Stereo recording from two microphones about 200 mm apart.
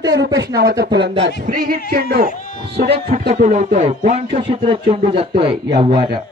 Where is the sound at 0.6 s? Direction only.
50° right (ahead or behind).